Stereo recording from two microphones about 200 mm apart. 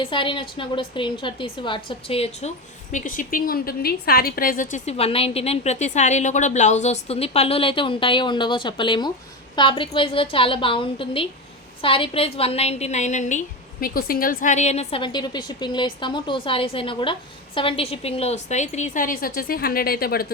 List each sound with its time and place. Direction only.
0.0 s a woman's voice: 25° left (ahead or behind)
2.9 s a woman's voice: 40° left (ahead or behind)